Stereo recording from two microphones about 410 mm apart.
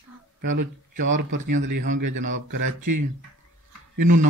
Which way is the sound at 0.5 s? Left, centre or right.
Right.